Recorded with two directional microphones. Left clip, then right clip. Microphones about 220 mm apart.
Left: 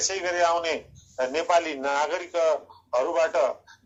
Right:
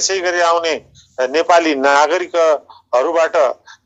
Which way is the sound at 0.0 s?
45° right (ahead or behind).